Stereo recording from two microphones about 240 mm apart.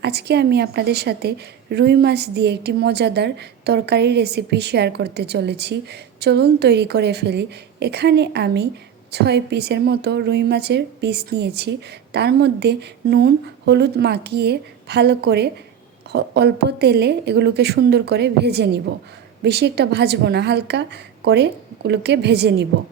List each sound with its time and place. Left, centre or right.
0.0 s a woman's voice: right